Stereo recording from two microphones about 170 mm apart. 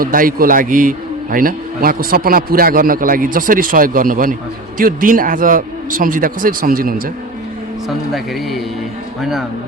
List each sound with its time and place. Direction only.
0.0 s a man's voice: 55° right (ahead or behind)
7.9 s a man's voice: centre (ahead or behind)